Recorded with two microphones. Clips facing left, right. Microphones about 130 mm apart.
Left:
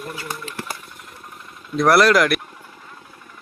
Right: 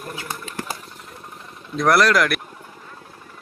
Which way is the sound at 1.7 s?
5° left (ahead or behind).